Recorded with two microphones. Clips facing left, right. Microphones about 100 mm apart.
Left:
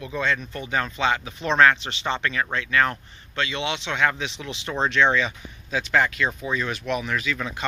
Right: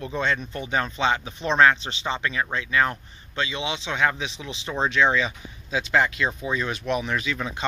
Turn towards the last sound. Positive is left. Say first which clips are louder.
# even
turn(degrees=-20)  # may be behind; listen again after turning